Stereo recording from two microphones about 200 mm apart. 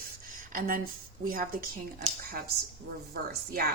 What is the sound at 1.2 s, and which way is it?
Speech, 45° right (ahead or behind).